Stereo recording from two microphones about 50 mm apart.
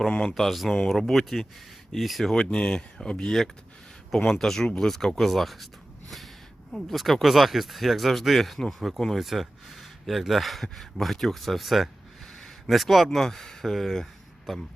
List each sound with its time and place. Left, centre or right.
0.3 s speech: centre
2.3 s speech: centre
6.7 s speech: centre